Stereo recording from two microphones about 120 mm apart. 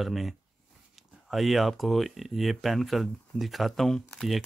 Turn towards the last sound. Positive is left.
turn(degrees=5)  # may be behind; listen again after turning